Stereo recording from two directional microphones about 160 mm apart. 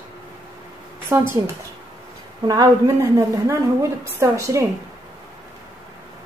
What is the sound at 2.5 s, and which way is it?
Speech, 20° right (ahead or behind).